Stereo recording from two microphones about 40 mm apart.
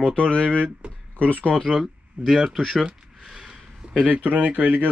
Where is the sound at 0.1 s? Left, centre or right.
Left.